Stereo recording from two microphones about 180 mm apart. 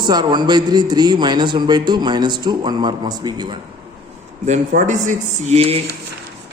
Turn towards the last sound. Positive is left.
turn(degrees=-35)  # may be behind; listen again after turning